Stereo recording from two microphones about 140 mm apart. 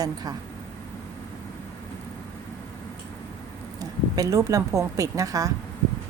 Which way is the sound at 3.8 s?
25° right (ahead or behind).